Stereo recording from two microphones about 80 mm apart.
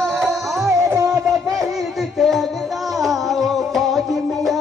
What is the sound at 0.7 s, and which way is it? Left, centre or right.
Music, right.